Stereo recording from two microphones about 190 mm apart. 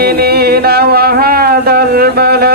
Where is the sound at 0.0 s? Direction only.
55° right (ahead or behind).